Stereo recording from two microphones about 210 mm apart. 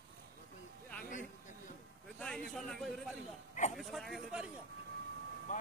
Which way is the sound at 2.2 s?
5° left (ahead or behind).